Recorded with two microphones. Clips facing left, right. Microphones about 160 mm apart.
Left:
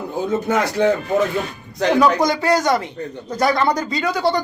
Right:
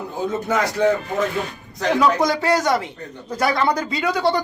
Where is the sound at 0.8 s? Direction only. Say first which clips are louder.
Left 1 dB; 25° left (ahead or behind).